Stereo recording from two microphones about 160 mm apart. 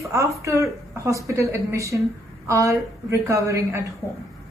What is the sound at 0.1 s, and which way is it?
Speech, 20° right (ahead or behind).